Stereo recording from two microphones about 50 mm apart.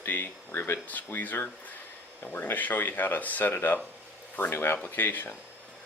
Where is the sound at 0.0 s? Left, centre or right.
Left.